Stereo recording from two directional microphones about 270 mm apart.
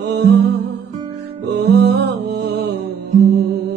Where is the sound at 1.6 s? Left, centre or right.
Right.